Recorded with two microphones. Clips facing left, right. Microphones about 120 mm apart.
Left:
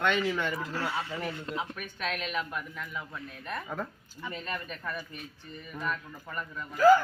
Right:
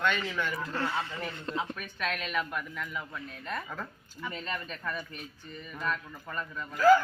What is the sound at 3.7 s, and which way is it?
Speech, 25° left (ahead or behind).